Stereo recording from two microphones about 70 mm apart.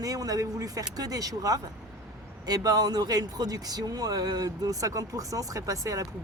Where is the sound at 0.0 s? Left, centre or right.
Right.